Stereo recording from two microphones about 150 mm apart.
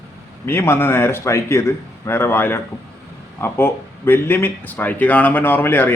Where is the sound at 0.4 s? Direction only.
15° left (ahead or behind).